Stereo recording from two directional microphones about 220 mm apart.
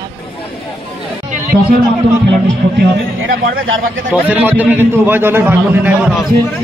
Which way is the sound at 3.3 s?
60° right (ahead or behind).